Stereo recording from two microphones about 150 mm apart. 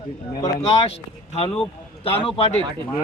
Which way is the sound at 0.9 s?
40° left (ahead or behind).